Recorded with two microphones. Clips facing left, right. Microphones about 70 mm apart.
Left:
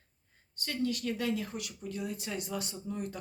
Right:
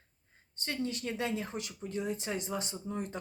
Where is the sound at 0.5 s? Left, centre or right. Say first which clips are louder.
Left 2 dB; right.